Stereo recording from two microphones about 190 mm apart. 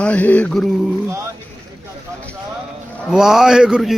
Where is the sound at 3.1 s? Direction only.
Centre (ahead or behind).